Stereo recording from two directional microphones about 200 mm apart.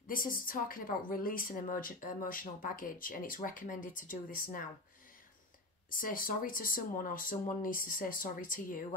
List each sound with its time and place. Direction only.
0.0 s a woman's voice: 45° left (ahead or behind)
5.9 s a woman's voice: 45° left (ahead or behind)